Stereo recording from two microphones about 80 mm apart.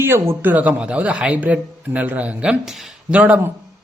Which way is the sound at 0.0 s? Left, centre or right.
Right.